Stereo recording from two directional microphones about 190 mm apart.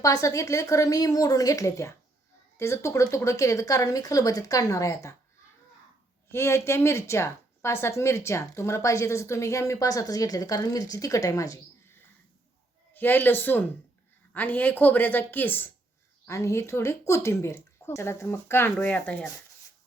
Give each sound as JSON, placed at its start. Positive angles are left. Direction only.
{"t": 0.0, "sound": "a woman's voice", "side_deg": 15}
{"t": 6.3, "sound": "a woman's voice", "side_deg": 15}